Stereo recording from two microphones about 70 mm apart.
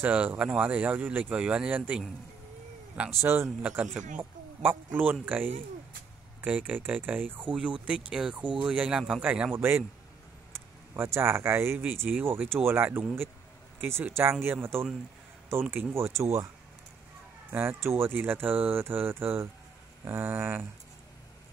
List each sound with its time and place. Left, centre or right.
0.0 s speech: right
1.3 s speech: centre
3.2 s speech: right
7.5 s speech: centre; by 16.4 s right
17.5 s speech: right